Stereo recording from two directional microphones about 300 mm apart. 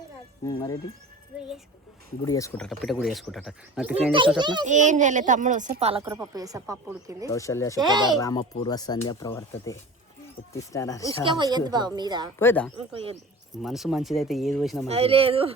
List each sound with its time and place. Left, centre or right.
0.4 s speech: centre
1.4 s speech: centre
2.2 s speech: centre
4.4 s a child's voice: centre
7.3 s speech: centre
7.8 s speech: centre
8.2 s speech: centre
11.3 s speech: centre
12.4 s speech: centre
14.8 s a child's voice: centre